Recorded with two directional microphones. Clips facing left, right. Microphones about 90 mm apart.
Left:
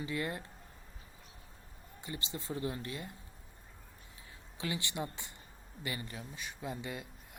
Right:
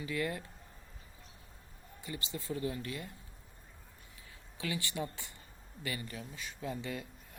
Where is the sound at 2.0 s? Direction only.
25° left (ahead or behind).